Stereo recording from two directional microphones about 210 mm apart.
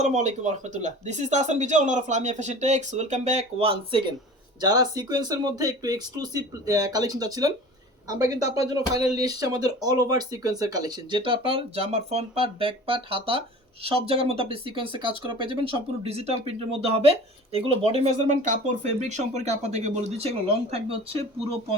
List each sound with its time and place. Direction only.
0.0 s speech: 35° right (ahead or behind)